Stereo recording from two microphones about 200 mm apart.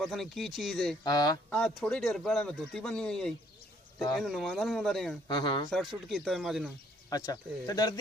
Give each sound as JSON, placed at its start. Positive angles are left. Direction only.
{"t": 0.0, "sound": "a man's voice", "side_deg": 0}
{"t": 1.0, "sound": "speech", "side_deg": 20}
{"t": 1.5, "sound": "a man's voice", "side_deg": 5}
{"t": 5.3, "sound": "speech", "side_deg": 25}
{"t": 5.7, "sound": "a man's voice", "side_deg": 0}
{"t": 7.1, "sound": "speech", "side_deg": 15}